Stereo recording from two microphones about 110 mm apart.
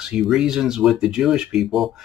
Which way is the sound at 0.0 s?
5° right (ahead or behind).